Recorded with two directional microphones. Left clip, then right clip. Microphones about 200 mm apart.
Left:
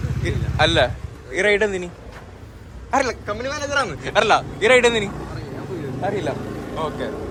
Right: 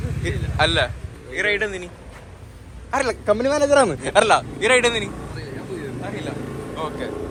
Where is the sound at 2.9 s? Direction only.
20° left (ahead or behind).